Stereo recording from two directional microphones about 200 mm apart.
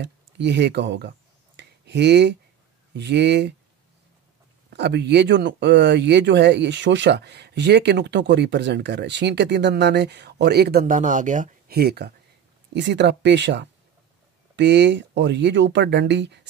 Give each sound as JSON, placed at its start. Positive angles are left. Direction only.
{"t": 0.0, "sound": "speech", "side_deg": -60}
{"t": 1.6, "sound": "a sound", "side_deg": -60}
{"t": 2.9, "sound": "speech", "side_deg": -60}
{"t": 4.7, "sound": "speech", "side_deg": -60}